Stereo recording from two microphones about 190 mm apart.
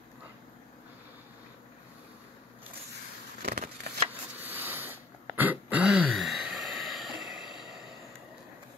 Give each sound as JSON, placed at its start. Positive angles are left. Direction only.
{"t": 3.4, "sound": "scissors", "side_deg": -55}
{"t": 4.4, "sound": "a sound", "side_deg": -10}
{"t": 5.3, "sound": "throat clearing", "side_deg": -10}